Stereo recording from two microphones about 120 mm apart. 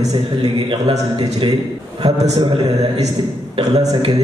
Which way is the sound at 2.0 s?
65° right (ahead or behind).